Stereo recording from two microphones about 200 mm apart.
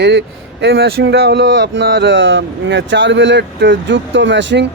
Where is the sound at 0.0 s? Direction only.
60° right (ahead or behind).